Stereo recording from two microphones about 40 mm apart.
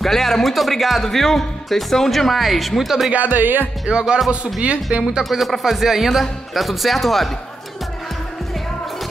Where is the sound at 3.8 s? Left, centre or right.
Right.